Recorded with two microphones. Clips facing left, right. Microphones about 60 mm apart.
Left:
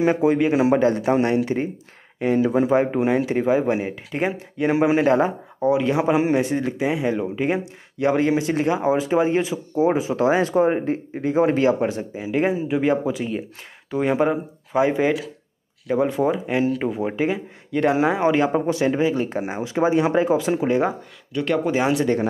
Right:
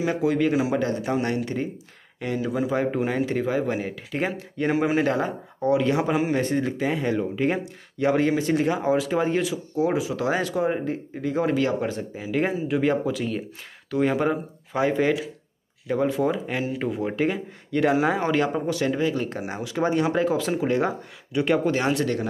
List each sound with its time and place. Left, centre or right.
0.0 s speech: left
2.9 s speech: centre
4.2 s speech: centre
6.1 s speech: left
6.4 s speech: centre
8.8 s speech: left
18.5 s speech: left
21.3 s speech: centre
21.6 s speech: centre